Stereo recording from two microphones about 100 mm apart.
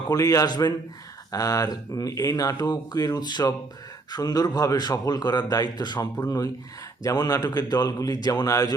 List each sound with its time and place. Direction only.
0.1 s a man's voice: 35° left (ahead or behind)